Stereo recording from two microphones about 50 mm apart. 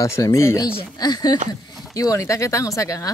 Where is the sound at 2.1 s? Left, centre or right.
Left.